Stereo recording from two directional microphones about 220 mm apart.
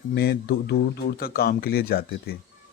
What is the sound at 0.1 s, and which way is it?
Speech, 45° left (ahead or behind).